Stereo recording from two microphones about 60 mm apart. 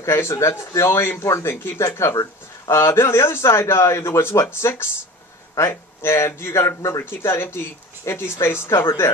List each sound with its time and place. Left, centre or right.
0.0 s speech: left
1.2 s speech: left
1.5 s speech: left
1.9 s speech: left
2.7 s speech: left